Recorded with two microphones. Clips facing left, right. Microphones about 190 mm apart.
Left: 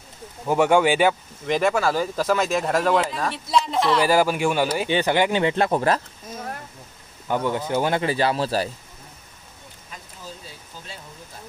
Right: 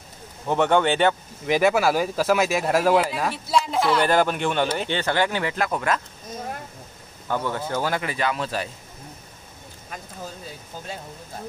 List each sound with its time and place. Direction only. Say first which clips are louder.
0.5 s speech: left 2 dB; 10° left (ahead or behind)
1.4 s speech: right 2 dB; 5° right (ahead or behind); by 6.0 s 30° left (ahead or behind)
7.2 s speech: left 3 dB; 15° left (ahead or behind); by 8.6 s 35° left (ahead or behind)